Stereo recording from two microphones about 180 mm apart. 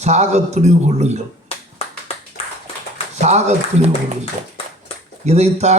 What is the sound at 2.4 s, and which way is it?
Clapping, 35° left (ahead or behind).